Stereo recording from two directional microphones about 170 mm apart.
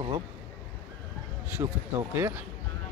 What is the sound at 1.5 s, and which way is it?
Speech, 15° right (ahead or behind).